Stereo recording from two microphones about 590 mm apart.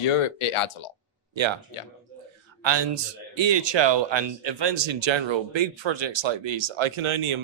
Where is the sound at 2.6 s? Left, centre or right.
Right.